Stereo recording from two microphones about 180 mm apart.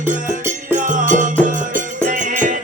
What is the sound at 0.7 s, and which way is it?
Music, 45° right (ahead or behind).